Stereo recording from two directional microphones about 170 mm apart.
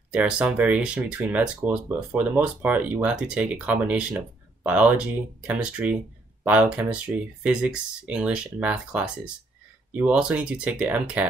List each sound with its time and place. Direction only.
0.1 s speech: 5° right (ahead or behind)